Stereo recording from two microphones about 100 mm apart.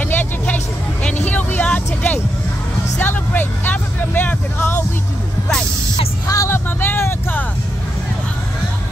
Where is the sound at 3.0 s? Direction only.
20° left (ahead or behind).